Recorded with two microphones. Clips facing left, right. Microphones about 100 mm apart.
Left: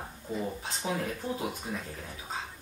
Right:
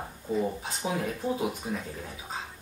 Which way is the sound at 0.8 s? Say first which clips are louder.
Right 3 dB; 10° right (ahead or behind).